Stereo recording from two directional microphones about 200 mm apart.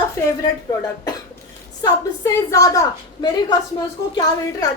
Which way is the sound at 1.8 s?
15° left (ahead or behind).